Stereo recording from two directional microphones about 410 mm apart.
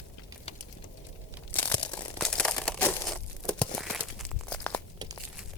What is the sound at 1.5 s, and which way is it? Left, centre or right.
Crumpling, centre.